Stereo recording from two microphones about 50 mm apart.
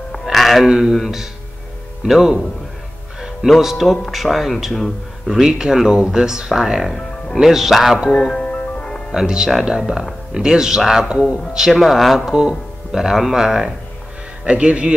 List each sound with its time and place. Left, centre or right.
0.1 s music: centre
0.7 s speech: centre
0.9 s speech: centre
3.4 s speech: centre
5.4 s speech: centre
8.3 s music: left
9.1 s speech: centre
14.4 s a man's voice: right